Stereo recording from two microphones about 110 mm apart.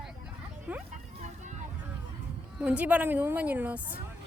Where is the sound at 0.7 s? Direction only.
15° right (ahead or behind).